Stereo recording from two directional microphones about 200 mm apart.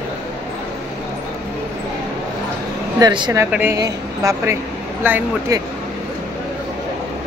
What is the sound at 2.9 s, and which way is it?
Speech, 20° right (ahead or behind).